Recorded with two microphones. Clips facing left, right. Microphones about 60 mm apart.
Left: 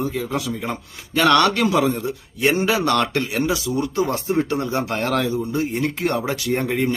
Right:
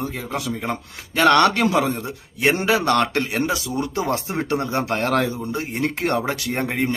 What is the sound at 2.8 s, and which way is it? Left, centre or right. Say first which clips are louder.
Speech: right 1 dB; right.